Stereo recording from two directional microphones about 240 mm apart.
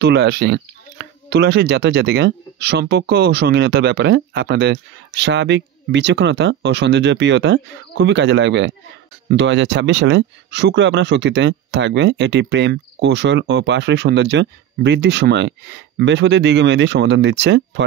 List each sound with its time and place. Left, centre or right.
0.0 s speech: right